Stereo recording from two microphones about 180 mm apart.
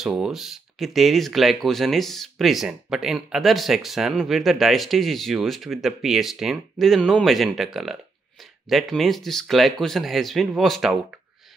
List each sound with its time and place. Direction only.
0.0 s speech: centre (ahead or behind)